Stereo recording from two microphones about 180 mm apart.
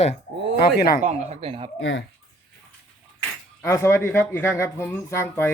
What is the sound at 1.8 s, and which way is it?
Speech, 90° left.